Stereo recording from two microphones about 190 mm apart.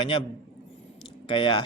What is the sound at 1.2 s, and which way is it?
Speech, 25° left (ahead or behind).